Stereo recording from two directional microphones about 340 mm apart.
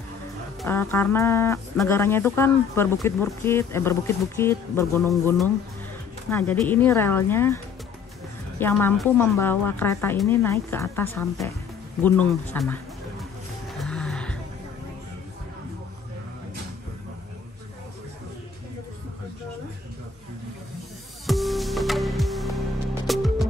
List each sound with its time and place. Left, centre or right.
0.6 s speech: centre
6.3 s speech: centre
13.7 s music: centre
21.3 s music: centre